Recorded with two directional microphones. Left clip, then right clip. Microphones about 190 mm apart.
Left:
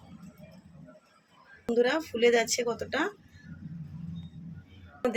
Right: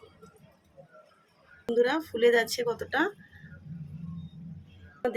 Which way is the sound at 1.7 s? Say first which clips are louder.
Even; 15° right (ahead or behind).